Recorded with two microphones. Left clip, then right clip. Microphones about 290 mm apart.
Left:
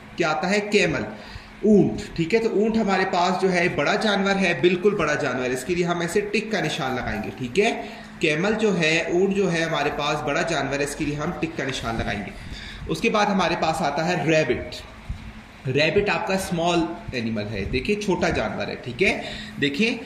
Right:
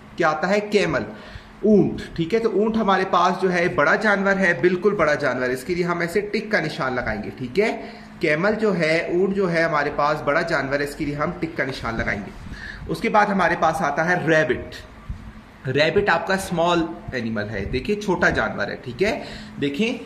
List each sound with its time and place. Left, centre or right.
0.2 s a man's voice: centre
2.1 s a man's voice: centre
15.6 s a man's voice: centre